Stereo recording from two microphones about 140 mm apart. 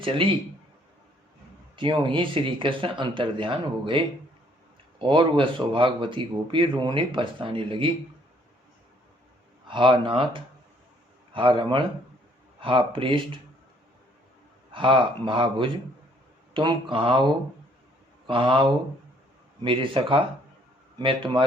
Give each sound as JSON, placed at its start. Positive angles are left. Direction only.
{"t": 0.0, "sound": "speech", "side_deg": -40}
{"t": 1.7, "sound": "speech", "side_deg": -35}
{"t": 9.6, "sound": "speech", "side_deg": -35}
{"t": 14.7, "sound": "speech", "side_deg": -35}
{"t": 18.3, "sound": "speech", "side_deg": -40}